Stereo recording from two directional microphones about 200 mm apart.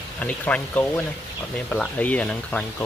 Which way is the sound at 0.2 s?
5° left (ahead or behind).